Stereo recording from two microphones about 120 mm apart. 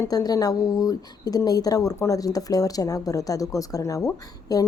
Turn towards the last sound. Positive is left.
turn(degrees=30)  # may be behind; listen again after turning